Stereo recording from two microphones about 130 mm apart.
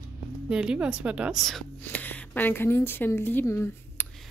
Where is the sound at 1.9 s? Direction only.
15° left (ahead or behind).